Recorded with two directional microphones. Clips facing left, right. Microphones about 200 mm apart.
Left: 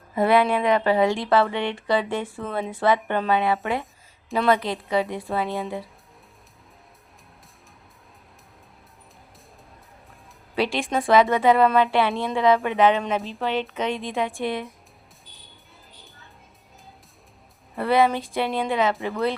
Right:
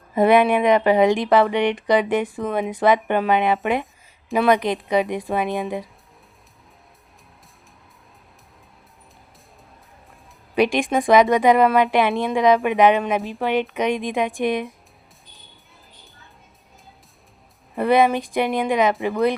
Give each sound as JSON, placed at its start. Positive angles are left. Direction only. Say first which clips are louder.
{"t": 0.1, "sound": "speech", "louder": "right 4 dB", "side_deg": -20}
{"t": 10.5, "sound": "speech", "louder": "right 5 dB", "side_deg": -15}
{"t": 17.7, "sound": "speech", "louder": "right 3 dB", "side_deg": -15}